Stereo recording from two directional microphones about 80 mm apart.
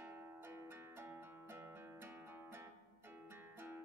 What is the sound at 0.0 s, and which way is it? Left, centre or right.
Music, right.